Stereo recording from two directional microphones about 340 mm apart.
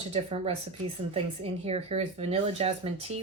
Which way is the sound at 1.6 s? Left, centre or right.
Centre.